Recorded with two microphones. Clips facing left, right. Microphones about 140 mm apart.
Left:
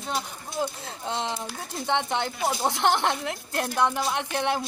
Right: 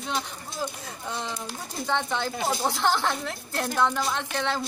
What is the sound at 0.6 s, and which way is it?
Speech, 20° left (ahead or behind).